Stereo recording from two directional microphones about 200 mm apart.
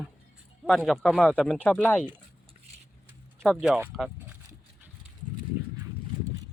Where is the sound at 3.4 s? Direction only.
Centre (ahead or behind).